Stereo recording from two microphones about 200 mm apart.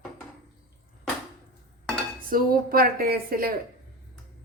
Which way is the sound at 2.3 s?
45° right (ahead or behind).